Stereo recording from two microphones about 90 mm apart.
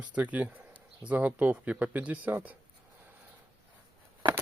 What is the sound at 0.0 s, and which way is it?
Speech, 15° right (ahead or behind).